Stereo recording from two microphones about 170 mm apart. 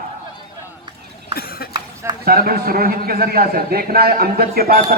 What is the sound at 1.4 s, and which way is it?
Cough, 60° left (ahead or behind).